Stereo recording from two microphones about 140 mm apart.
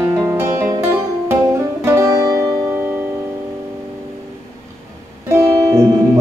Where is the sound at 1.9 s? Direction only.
20° right (ahead or behind).